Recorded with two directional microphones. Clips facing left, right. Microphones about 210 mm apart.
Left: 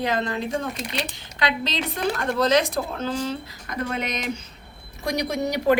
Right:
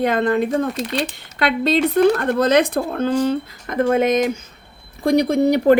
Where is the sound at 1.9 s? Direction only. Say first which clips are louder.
Right 6 dB; 55° right (ahead or behind).